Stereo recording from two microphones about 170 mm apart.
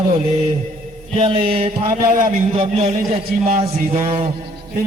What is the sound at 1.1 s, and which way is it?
A man's voice, 30° right (ahead or behind).